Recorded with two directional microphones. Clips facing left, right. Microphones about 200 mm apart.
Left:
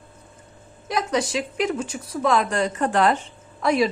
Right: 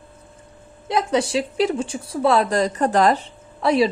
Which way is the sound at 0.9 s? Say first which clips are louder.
Right 3 dB; 30° right (ahead or behind).